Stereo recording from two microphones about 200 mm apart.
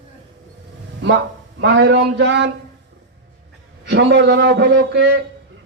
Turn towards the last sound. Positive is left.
turn(degrees=-60)  # may be behind; listen again after turning